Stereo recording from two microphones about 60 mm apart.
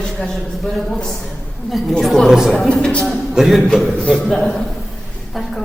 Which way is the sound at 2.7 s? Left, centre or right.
Centre.